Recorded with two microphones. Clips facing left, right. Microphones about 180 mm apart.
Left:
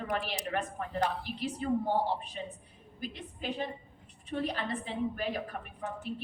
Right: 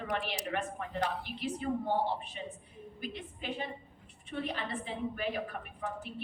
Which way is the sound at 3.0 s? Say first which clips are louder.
Left 2 dB; 40° left (ahead or behind).